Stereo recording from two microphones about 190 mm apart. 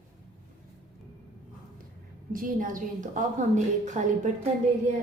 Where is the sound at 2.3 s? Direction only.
45° right (ahead or behind).